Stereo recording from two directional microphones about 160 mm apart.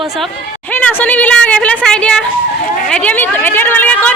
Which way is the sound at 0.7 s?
10° left (ahead or behind).